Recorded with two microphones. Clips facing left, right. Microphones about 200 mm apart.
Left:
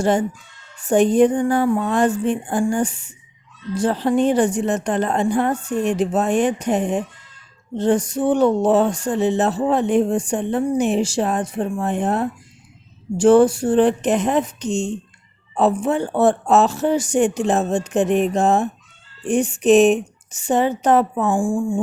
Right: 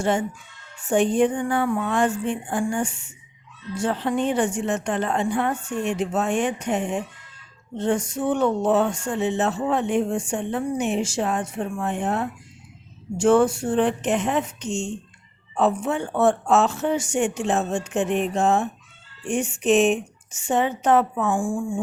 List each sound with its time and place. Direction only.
0.0 s speech: 35° left (ahead or behind)